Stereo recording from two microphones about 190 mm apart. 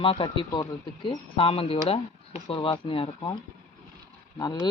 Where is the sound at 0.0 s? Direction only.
25° left (ahead or behind).